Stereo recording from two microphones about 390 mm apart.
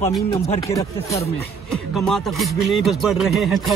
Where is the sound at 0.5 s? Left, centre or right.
Centre.